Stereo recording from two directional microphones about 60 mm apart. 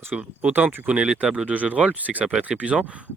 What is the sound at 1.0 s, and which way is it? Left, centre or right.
Speech, centre.